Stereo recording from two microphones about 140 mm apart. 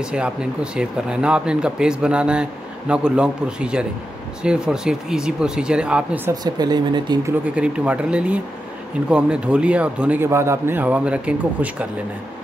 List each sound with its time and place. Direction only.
0.0 s speech: 5° right (ahead or behind)
6.4 s speech: 30° right (ahead or behind)
7.5 s speech: 10° right (ahead or behind)